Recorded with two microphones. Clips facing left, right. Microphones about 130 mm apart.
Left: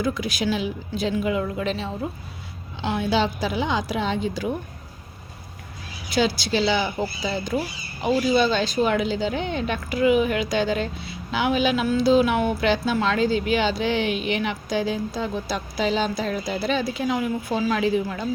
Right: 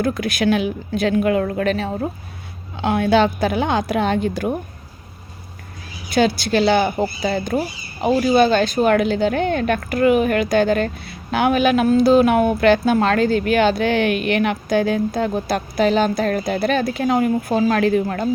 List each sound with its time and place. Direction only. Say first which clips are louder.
0.0 s speech: right 5 dB; 55° right (ahead or behind)
6.1 s speech: right 5 dB; 55° right (ahead or behind)